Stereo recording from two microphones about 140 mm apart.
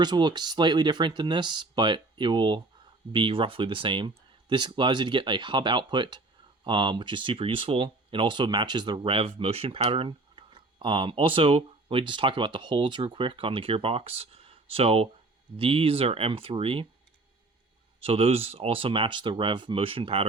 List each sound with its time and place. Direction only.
0.0 s speech: 30° right (ahead or behind)
18.0 s speech: 45° right (ahead or behind)